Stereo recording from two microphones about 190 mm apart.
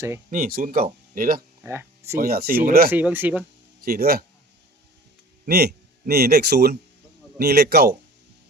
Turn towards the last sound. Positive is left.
turn(degrees=-60)  # may be behind; listen again after turning